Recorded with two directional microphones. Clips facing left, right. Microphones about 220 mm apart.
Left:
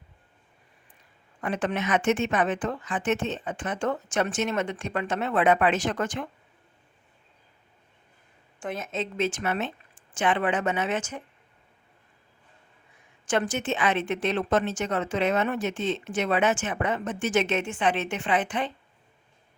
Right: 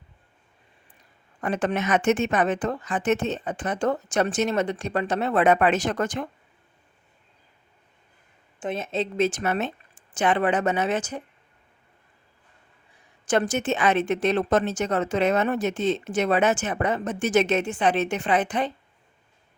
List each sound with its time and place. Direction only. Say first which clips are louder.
1.4 s a woman's voice: right 3 dB; 40° right (ahead or behind)
8.6 s a woman's voice: right 4 dB; 25° right (ahead or behind)
12.9 s a woman's voice: right 3 dB; 40° right (ahead or behind)